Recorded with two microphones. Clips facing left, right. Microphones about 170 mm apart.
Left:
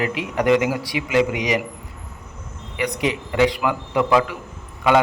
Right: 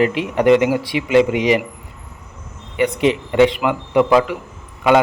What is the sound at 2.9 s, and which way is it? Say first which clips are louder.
A man's voice: right 5 dB; 25° right (ahead or behind).